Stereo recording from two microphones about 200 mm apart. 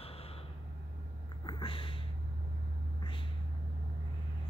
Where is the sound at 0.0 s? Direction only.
30° left (ahead or behind).